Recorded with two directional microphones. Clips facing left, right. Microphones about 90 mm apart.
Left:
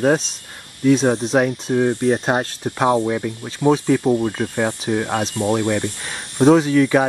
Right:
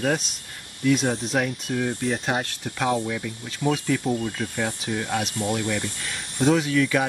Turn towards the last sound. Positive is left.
turn(degrees=35)  # may be behind; listen again after turning